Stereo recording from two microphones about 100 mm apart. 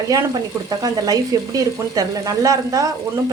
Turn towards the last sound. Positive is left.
turn(degrees=-35)  # may be behind; listen again after turning